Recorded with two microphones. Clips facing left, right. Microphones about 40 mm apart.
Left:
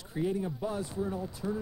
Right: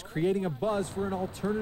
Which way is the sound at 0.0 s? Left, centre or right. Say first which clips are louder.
Right 4 dB; right.